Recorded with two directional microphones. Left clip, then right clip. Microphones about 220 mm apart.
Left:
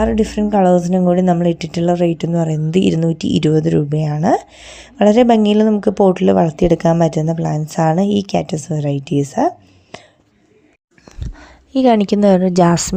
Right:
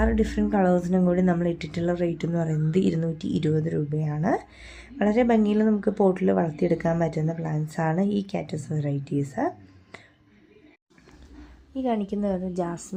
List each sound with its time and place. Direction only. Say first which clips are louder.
0.0 s a woman's voice: left 8 dB; 25° left (ahead or behind)
9.2 s a sound: left 11 dB; 30° left (ahead or behind)
11.3 s a woman's voice: left 16 dB; 45° left (ahead or behind)